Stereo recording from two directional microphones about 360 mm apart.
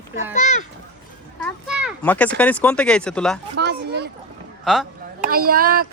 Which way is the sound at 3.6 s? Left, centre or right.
Right.